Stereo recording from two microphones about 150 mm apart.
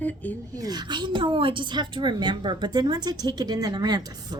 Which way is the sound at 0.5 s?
25° right (ahead or behind).